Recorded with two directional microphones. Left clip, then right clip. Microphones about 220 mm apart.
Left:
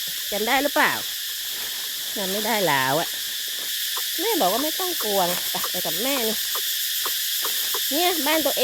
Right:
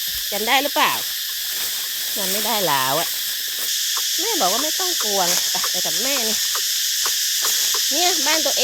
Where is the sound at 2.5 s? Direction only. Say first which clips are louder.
Right 1 dB; 20° left (ahead or behind).